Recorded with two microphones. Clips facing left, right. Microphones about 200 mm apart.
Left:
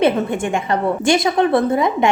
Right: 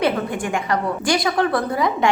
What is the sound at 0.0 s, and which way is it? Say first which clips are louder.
A woman's voice: left 4 dB; 25° left (ahead or behind).